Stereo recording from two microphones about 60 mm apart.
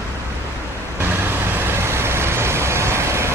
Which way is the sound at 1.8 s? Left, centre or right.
Right.